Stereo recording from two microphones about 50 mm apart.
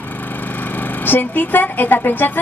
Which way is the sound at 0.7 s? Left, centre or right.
Left.